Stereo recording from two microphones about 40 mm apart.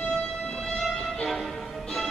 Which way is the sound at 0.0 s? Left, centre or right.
Centre.